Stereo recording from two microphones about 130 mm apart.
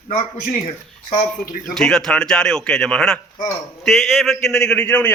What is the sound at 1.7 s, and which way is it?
A man's voice, 5° left (ahead or behind).